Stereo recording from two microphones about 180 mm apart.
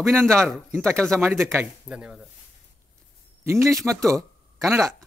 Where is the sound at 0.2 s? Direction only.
15° right (ahead or behind).